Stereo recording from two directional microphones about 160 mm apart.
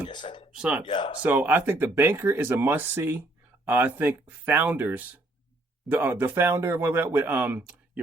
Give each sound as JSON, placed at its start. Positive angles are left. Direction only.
{"t": 0.1, "sound": "a sound", "side_deg": 30}
{"t": 0.5, "sound": "speech", "side_deg": -5}
{"t": 0.9, "sound": "speech", "side_deg": 30}
{"t": 1.2, "sound": "speech", "side_deg": -10}